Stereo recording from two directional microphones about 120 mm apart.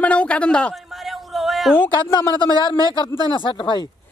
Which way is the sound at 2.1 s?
40° left (ahead or behind).